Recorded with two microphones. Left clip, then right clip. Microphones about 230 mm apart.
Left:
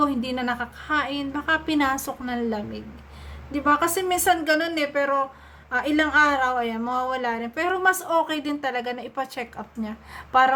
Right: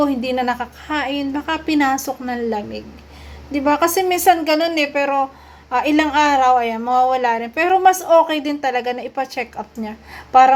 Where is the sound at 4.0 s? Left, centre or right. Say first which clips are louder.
Right 7 dB; left.